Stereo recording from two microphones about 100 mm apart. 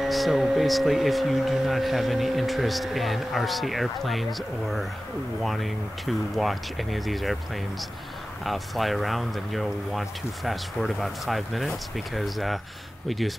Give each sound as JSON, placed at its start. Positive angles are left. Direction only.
{"t": 0.0, "sound": "speech", "side_deg": 0}
{"t": 8.5, "sound": "speech", "side_deg": 0}